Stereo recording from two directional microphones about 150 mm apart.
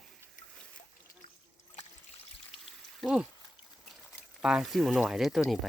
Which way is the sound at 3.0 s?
5° right (ahead or behind).